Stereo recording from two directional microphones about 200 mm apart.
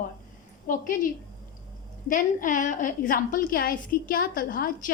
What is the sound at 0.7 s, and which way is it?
A woman's voice, 45° left (ahead or behind).